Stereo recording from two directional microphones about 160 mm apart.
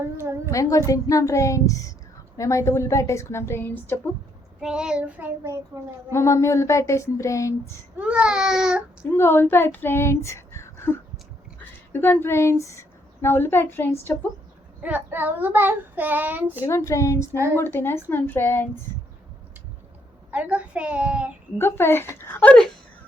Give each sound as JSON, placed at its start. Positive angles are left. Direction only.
{"t": 0.2, "sound": "child singing", "side_deg": -15}
{"t": 0.5, "sound": "a woman's voice", "side_deg": 20}
{"t": 4.6, "sound": "child singing", "side_deg": -5}
{"t": 6.1, "sound": "speech", "side_deg": 20}
{"t": 7.9, "sound": "speech", "side_deg": -5}
{"t": 9.1, "sound": "speech", "side_deg": 15}
{"t": 11.9, "sound": "a woman's voice", "side_deg": 10}
{"t": 14.8, "sound": "child singing", "side_deg": -10}
{"t": 16.6, "sound": "a woman's voice", "side_deg": 15}
{"t": 20.3, "sound": "child singing", "side_deg": -10}
{"t": 21.6, "sound": "a woman's voice", "side_deg": 15}